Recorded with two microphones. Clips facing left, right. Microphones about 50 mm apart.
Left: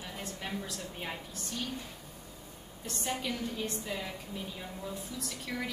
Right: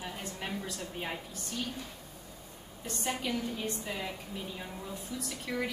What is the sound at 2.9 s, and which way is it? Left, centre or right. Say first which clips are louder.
A woman's voice: right 1 dB; centre.